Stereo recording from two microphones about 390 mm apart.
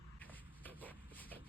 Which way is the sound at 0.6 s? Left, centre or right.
Centre.